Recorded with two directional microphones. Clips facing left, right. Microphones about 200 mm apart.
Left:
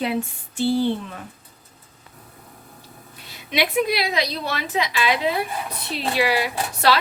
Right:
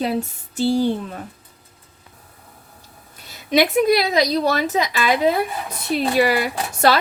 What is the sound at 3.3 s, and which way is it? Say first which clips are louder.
A woman's voice: right 6 dB; 45° right (ahead or behind).